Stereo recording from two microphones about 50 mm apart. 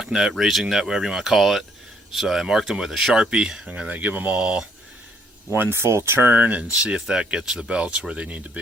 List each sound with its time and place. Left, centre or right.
0.0 s speech: centre
3.2 s speech: centre
3.7 s speech: right
5.5 s speech: right
6.1 s speech: right
6.8 s speech: centre